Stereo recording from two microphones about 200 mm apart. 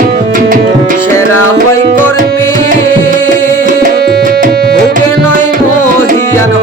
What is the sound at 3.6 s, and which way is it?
Tabla, 55° right (ahead or behind).